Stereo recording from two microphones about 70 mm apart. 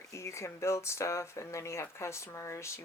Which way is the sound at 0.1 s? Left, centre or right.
Left.